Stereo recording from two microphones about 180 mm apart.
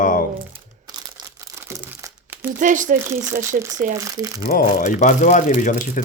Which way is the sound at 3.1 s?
15° right (ahead or behind).